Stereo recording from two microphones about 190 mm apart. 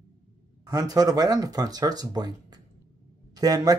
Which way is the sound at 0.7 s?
20° right (ahead or behind).